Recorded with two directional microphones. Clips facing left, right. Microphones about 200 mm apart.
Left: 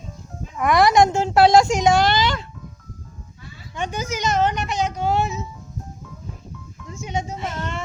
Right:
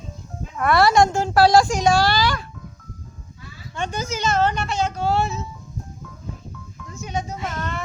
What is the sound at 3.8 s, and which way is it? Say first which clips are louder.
Speech: even; 15° left (ahead or behind).